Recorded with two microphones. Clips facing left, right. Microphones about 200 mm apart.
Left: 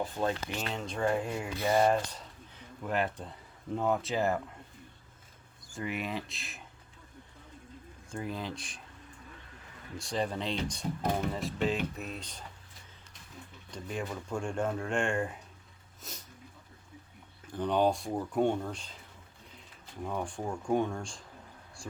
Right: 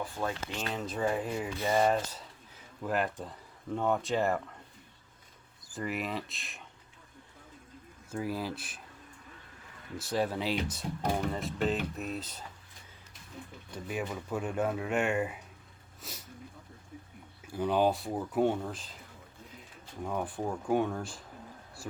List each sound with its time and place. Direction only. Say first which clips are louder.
0.0 s speech: left 3 dB; 20° left (ahead or behind)
0.6 s speech: right 1 dB; centre (ahead or behind)
5.6 s speech: right 1 dB; centre (ahead or behind)
8.1 s speech: right 3 dB; 5° right (ahead or behind)
10.0 s speech: right 2 dB; 5° right (ahead or behind)
13.7 s speech: right 1 dB; 5° right (ahead or behind)
17.4 s speech: even; 10° right (ahead or behind)
20.1 s speech: right 1 dB; 5° right (ahead or behind)